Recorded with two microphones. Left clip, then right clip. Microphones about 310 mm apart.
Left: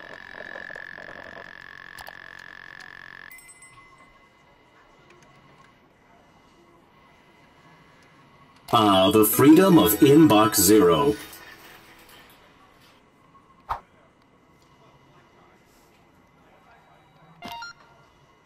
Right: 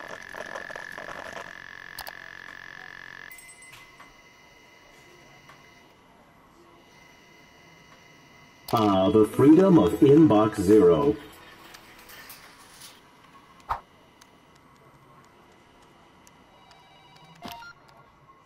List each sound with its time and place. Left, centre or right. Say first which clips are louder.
0.4 s a sound: even; right
0.9 s frog: right 2 dB; right
1.5 s frog: even; centre
8.7 s speech: left 3 dB; left
11.4 s music: left 1 dB; centre
13.7 s tick: even; centre
17.4 s music: left 3 dB; centre